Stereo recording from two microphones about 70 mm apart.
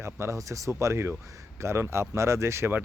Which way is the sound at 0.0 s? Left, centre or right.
Right.